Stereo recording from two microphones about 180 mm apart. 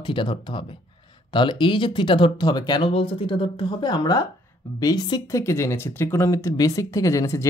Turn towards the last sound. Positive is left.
turn(degrees=15)  # may be behind; listen again after turning